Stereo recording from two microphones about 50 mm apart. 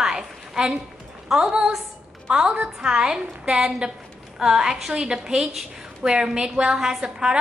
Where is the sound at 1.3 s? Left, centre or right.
Centre.